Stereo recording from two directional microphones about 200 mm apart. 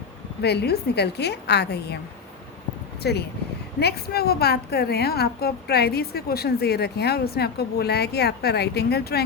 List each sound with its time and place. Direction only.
0.4 s a woman's voice: 55° left (ahead or behind)
3.0 s a woman's voice: 55° left (ahead or behind)